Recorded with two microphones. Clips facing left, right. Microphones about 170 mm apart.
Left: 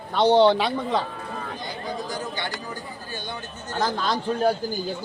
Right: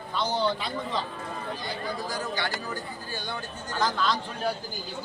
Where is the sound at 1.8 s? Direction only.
20° left (ahead or behind).